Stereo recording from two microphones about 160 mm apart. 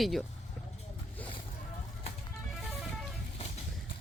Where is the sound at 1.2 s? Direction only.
10° left (ahead or behind).